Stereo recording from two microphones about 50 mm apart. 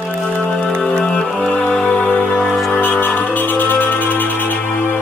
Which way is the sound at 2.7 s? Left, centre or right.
Left.